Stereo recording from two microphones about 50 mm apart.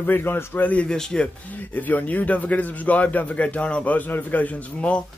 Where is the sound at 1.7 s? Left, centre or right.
Left.